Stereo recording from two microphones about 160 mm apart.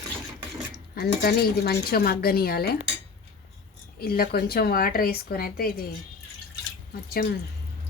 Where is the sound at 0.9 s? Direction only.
70° left (ahead or behind).